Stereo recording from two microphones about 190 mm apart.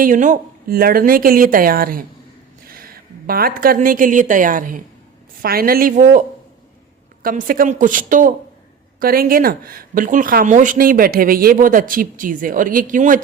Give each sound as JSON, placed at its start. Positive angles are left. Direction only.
{"t": 0.0, "sound": "a woman's voice", "side_deg": -45}